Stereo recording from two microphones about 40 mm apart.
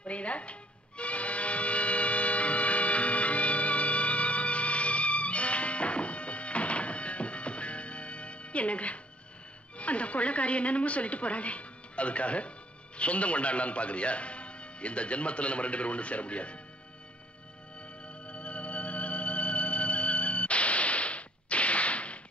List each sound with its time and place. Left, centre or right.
0.0 s music: left
9.8 s a woman's voice: left
18.2 s music: left